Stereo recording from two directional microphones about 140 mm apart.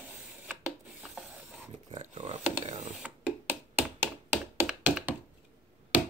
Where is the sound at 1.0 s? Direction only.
5° right (ahead or behind).